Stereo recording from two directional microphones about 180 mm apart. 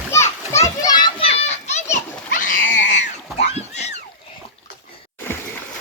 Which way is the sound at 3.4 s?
35° left (ahead or behind).